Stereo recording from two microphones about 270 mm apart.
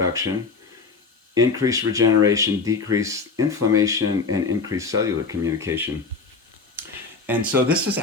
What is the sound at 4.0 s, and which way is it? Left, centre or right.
Speech, right.